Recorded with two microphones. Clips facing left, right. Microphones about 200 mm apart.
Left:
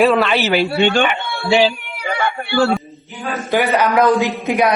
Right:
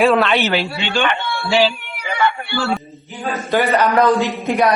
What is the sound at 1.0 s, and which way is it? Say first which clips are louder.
Speech: left 1 dB; 15° left (ahead or behind).